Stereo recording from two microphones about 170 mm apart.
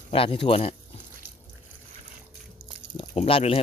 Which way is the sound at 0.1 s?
35° left (ahead or behind).